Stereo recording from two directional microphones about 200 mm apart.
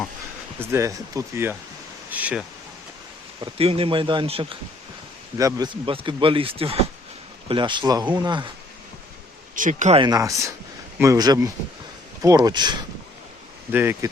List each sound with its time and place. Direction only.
0.6 s speech: 15° right (ahead or behind)
3.4 s speech: 30° right (ahead or behind)
9.6 s speech: 40° right (ahead or behind)
10.0 s speech: 15° right (ahead or behind)
13.7 s speech: 10° right (ahead or behind)